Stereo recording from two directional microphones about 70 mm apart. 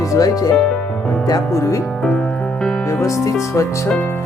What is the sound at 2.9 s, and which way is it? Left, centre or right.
Music, left.